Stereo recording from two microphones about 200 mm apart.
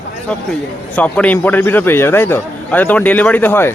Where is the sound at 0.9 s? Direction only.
5° left (ahead or behind).